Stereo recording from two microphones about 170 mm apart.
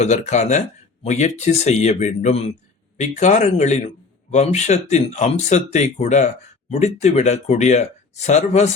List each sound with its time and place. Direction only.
0.0 s a man's voice: 40° left (ahead or behind)